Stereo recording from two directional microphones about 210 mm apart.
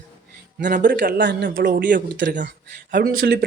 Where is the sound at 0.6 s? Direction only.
40° right (ahead or behind); by 1.5 s 55° right (ahead or behind).